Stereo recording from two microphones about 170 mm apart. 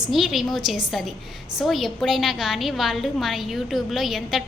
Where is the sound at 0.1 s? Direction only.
Centre (ahead or behind).